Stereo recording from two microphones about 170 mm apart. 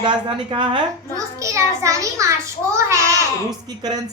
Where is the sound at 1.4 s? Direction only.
20° right (ahead or behind).